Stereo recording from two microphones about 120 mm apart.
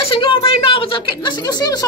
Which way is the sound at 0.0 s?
45° left (ahead or behind).